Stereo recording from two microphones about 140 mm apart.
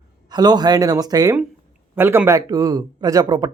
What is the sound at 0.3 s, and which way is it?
Speech, 30° right (ahead or behind).